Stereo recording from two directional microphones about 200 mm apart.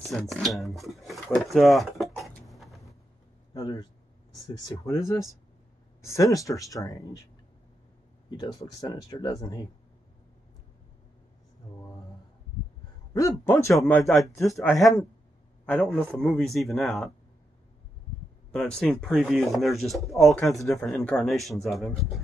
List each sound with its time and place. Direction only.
0.0 s speech: centre (ahead or behind)
3.5 s speech: 20° left (ahead or behind)
8.3 s speech: 20° left (ahead or behind)
13.3 s speech: 10° left (ahead or behind)
18.5 s speech: centre (ahead or behind)